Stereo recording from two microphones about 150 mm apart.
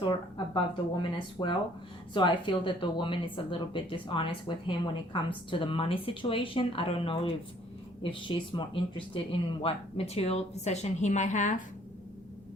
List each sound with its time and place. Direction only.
0.0 s speech: 35° left (ahead or behind); by 11.6 s 55° left (ahead or behind)